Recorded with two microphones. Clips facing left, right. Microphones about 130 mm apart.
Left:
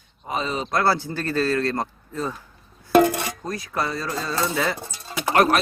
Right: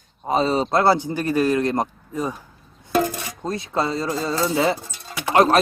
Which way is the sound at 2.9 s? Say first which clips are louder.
Left 5 dB; 65° left (ahead or behind).